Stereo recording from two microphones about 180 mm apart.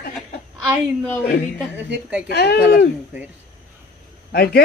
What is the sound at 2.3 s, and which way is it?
Speech, 65° left (ahead or behind).